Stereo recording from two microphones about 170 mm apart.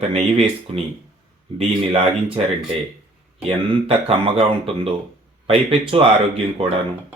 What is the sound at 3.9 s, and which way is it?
Speech, 35° right (ahead or behind).